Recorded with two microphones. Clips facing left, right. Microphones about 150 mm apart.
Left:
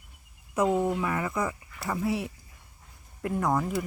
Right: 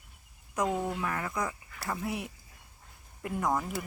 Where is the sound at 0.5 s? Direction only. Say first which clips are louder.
Left 6 dB; 10° left (ahead or behind).